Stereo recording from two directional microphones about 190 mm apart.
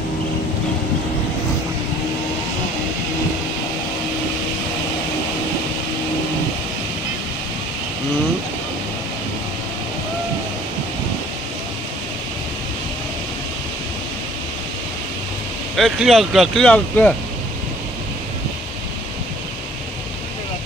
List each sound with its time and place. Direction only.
15.7 s speech: centre (ahead or behind)